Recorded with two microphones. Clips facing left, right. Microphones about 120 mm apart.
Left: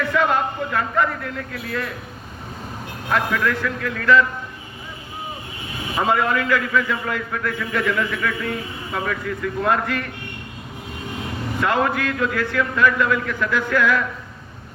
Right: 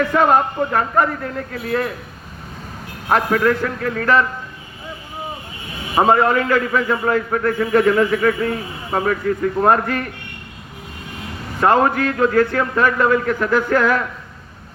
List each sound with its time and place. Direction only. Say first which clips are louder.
0.1 s a man's voice: right 5 dB; 40° right (ahead or behind)
3.1 s a man's voice: right 5 dB; 40° right (ahead or behind)
6.0 s a man's voice: right 6 dB; 35° right (ahead or behind)
11.6 s a man's voice: right 6 dB; 40° right (ahead or behind)